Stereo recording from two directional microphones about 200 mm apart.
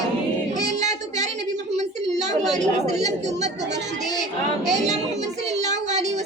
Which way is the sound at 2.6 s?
35° right (ahead or behind).